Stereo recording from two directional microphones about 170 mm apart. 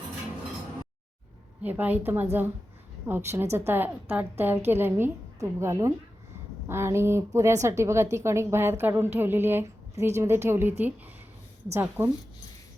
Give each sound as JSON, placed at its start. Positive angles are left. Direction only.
{"t": 1.6, "sound": "a woman's voice", "side_deg": -10}